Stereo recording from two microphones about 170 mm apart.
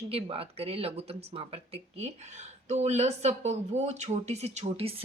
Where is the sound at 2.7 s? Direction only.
40° right (ahead or behind).